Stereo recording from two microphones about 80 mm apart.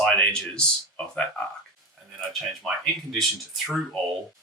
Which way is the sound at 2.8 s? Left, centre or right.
Centre.